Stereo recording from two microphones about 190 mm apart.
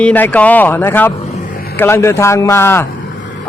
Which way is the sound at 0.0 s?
5° left (ahead or behind).